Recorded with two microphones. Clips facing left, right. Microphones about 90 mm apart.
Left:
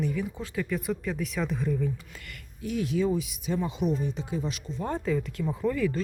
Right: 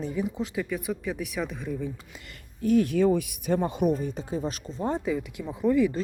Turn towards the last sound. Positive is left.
turn(degrees=-20)  # may be behind; listen again after turning